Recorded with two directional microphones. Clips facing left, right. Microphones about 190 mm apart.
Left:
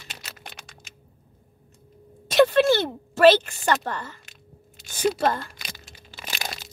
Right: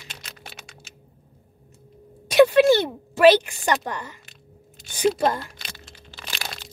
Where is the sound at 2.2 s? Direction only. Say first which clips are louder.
Right 3 dB; 10° right (ahead or behind).